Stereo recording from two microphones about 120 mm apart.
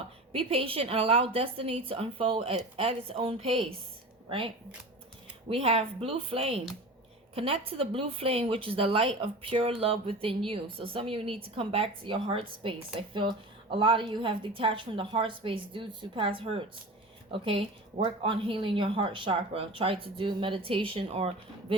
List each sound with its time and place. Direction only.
0.3 s a woman's voice: 50° right (ahead or behind)